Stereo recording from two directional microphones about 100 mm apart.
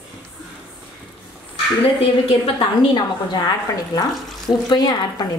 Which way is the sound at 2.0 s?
65° left (ahead or behind).